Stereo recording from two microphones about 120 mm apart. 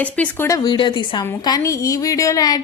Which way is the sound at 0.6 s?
40° left (ahead or behind).